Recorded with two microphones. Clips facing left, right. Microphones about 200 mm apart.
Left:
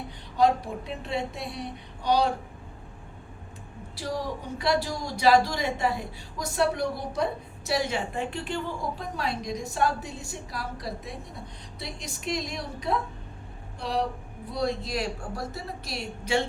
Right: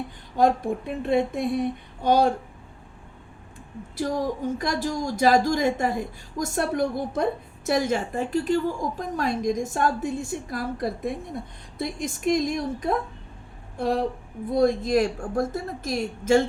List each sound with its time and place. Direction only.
0.3 s speech: 50° right (ahead or behind)
3.9 s speech: 50° right (ahead or behind)